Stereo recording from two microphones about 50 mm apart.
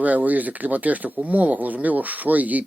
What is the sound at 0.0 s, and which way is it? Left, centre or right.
Speech, right.